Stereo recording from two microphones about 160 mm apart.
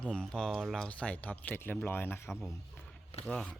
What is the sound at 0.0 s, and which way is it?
Speech, 5° left (ahead or behind).